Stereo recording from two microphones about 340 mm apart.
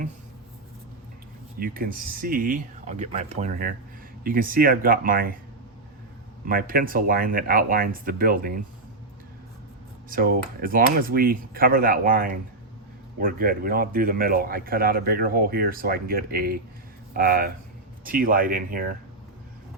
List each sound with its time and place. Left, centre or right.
1.5 s a man's voice: right
6.4 s a man's voice: right
10.1 s a man's voice: right